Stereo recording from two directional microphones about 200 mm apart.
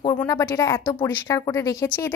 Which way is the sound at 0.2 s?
15° left (ahead or behind).